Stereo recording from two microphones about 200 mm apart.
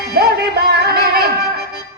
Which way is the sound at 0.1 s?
50° right (ahead or behind).